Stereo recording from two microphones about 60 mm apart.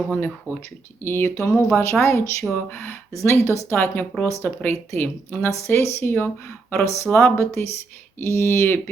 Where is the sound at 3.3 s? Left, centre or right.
Left.